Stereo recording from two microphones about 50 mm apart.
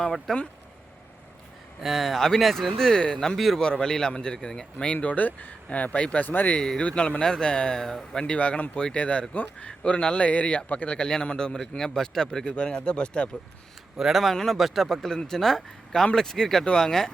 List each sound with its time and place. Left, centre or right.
0.3 s speech: centre
1.8 s speech: centre
3.6 s speech: centre
4.9 s speech: left
6.6 s speech: centre
8.2 s a man's voice: left
13.9 s speech: centre